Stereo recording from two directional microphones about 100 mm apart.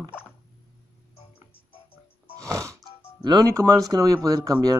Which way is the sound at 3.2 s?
45° right (ahead or behind).